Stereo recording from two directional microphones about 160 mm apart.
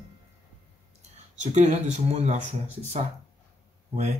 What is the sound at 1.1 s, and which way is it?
Speech, 45° right (ahead or behind).